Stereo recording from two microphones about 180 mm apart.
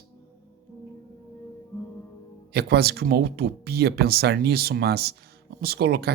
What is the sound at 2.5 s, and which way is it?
Speech, 65° right (ahead or behind).